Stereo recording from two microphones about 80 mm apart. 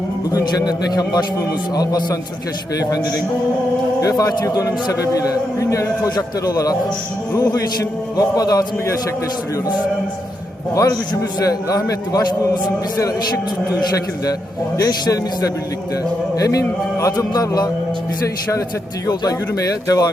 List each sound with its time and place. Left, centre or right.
0.3 s a man's voice: left
4.2 s a man's voice: left
6.1 s a man's voice: left
10.8 s a man's voice: left
14.8 s a man's voice: left
19.0 s a man's voice: left